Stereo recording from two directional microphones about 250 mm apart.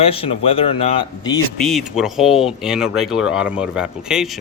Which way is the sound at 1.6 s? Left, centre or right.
Centre.